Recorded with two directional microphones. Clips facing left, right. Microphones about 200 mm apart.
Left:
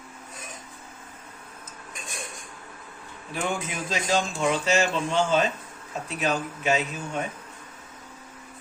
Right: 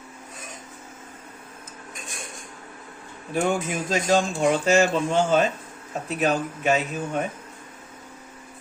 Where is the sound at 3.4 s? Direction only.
45° right (ahead or behind).